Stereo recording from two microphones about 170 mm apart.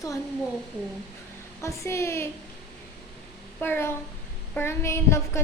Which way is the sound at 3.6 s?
15° left (ahead or behind).